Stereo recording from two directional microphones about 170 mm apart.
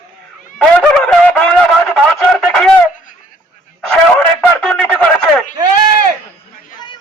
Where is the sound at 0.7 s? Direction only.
5° left (ahead or behind).